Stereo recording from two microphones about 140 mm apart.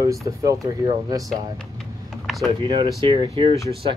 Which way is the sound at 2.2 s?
Centre (ahead or behind).